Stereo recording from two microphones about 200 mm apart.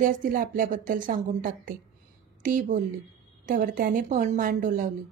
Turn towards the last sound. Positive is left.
turn(degrees=-40)  # may be behind; listen again after turning